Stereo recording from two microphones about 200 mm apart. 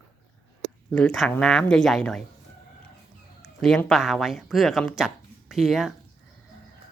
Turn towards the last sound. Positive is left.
turn(degrees=0)  # may be behind; listen again after turning